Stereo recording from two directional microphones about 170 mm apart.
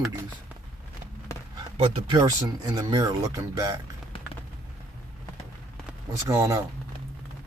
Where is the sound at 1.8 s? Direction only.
35° right (ahead or behind).